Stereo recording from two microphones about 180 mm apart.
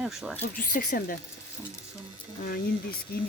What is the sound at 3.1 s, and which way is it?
Speech, 55° left (ahead or behind).